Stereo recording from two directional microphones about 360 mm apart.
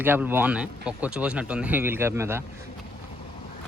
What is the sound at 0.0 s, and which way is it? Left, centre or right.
Speech, centre.